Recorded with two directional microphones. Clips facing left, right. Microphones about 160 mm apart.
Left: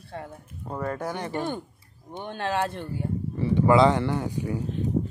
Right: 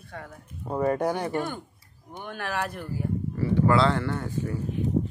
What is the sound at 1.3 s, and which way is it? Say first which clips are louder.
Speech: even; 20° left (ahead or behind).